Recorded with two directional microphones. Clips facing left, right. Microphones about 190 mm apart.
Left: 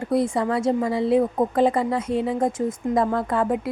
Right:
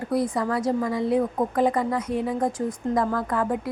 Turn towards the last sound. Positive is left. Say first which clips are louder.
# left 3 dB
turn(degrees=25)  # may be behind; listen again after turning